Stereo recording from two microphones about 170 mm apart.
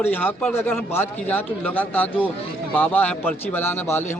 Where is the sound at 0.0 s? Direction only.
10° left (ahead or behind).